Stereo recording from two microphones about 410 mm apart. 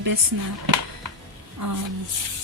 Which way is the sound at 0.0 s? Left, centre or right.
Right.